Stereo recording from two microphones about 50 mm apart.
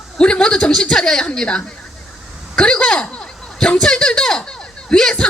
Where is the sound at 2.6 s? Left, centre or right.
Centre.